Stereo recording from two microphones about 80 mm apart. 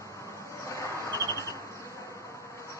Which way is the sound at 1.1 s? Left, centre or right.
Left.